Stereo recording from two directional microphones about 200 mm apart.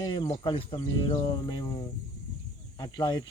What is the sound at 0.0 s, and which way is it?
Speech, 25° left (ahead or behind).